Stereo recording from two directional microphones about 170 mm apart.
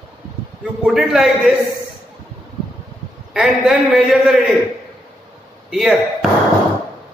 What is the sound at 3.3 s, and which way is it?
A man's voice, 5° right (ahead or behind).